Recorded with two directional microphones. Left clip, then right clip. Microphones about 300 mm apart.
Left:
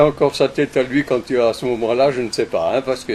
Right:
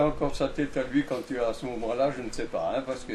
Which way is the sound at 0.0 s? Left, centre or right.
Left.